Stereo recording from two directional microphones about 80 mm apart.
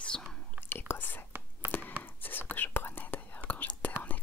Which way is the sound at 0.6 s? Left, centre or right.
Left.